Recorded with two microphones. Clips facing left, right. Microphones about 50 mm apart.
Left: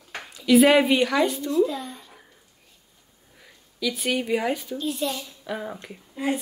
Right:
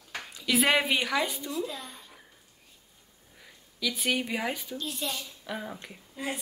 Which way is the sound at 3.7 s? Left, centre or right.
Centre.